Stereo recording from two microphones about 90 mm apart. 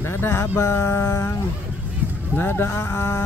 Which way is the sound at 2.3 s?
25° left (ahead or behind).